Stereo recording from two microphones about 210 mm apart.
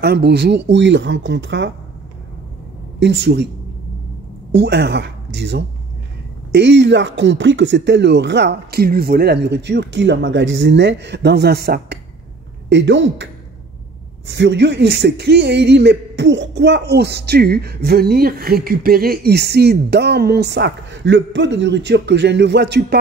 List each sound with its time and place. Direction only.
0.0 s speech: 50° right (ahead or behind)
3.0 s speech: 55° right (ahead or behind)
4.6 s speech: 55° right (ahead or behind)